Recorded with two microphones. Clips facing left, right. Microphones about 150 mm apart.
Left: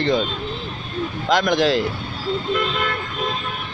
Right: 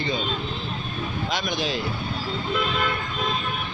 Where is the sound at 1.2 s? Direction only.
90° left.